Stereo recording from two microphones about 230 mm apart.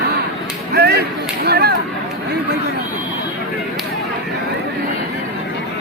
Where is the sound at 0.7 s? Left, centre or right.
Right.